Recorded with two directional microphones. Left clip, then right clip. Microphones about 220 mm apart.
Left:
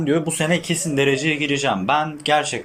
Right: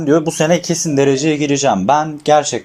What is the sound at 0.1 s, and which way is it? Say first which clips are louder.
A man's voice: right 8 dB; 10° right (ahead or behind).